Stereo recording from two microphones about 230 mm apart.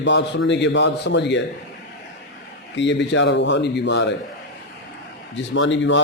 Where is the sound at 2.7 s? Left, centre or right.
Left.